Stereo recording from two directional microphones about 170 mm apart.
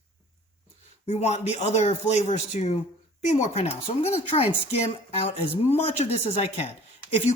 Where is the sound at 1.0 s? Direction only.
40° left (ahead or behind).